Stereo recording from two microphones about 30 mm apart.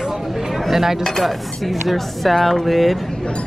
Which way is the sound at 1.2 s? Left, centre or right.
Centre.